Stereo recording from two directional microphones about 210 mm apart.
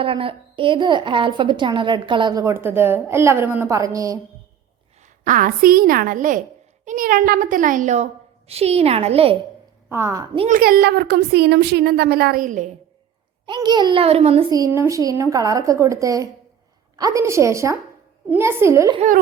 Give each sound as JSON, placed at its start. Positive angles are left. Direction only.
{"t": 0.0, "sound": "a woman's voice", "side_deg": -25}
{"t": 5.0, "sound": "a woman's voice", "side_deg": -40}
{"t": 9.9, "sound": "a woman's voice", "side_deg": -15}
{"t": 10.3, "sound": "a woman's voice", "side_deg": -30}
{"t": 10.6, "sound": "speech", "side_deg": -45}
{"t": 13.4, "sound": "a woman's voice", "side_deg": -20}
{"t": 14.5, "sound": "a woman's voice", "side_deg": -15}
{"t": 18.9, "sound": "a woman's voice", "side_deg": -40}